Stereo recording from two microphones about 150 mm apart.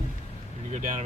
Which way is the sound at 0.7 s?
60° right (ahead or behind).